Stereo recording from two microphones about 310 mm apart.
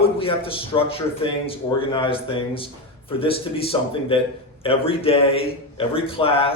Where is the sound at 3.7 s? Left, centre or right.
Centre.